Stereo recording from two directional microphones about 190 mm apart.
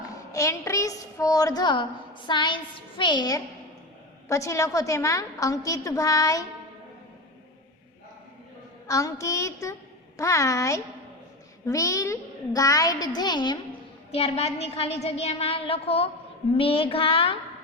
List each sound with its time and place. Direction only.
0.3 s a woman's voice: 15° left (ahead or behind)
8.9 s a woman's voice: 15° left (ahead or behind)